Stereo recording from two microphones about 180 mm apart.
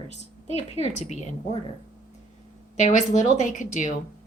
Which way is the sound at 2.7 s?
40° left (ahead or behind).